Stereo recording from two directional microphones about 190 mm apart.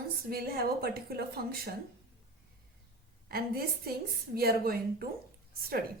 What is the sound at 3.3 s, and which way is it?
Speech, 50° right (ahead or behind).